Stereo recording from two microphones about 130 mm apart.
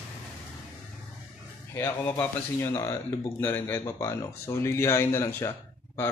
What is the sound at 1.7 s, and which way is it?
Speech, 15° left (ahead or behind).